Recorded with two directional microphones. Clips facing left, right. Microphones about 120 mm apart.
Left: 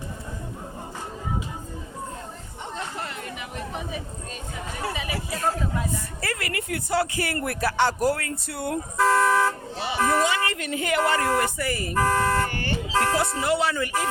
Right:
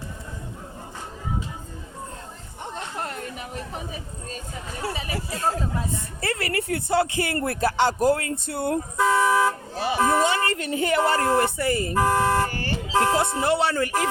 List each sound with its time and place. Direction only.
2.7 s chatter: 45° right (ahead or behind)
4.9 s a woman's voice: 35° right (ahead or behind)
9.0 s car: 5° right (ahead or behind)
9.7 s vehicle: 45° right (ahead or behind)
10.2 s speech: 35° right (ahead or behind)
11.9 s speech: 15° right (ahead or behind)
12.5 s vehicle: 35° right (ahead or behind)
12.9 s speech: 20° right (ahead or behind)